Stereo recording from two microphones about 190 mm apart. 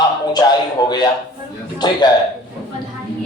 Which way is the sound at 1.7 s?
20° left (ahead or behind).